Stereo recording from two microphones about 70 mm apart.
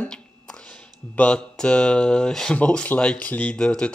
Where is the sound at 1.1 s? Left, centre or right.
Centre.